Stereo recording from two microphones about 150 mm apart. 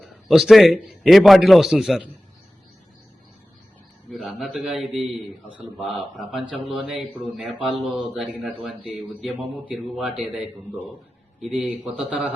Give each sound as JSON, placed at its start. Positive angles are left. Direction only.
{"t": 0.0, "sound": "a man's voice", "side_deg": 0}
{"t": 4.1, "sound": "a man's voice", "side_deg": 0}